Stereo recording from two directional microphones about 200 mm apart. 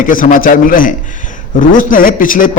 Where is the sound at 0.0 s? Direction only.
45° left (ahead or behind).